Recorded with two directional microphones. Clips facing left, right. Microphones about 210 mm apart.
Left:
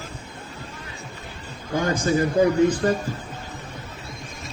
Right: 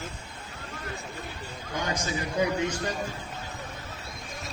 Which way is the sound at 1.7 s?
55° left (ahead or behind).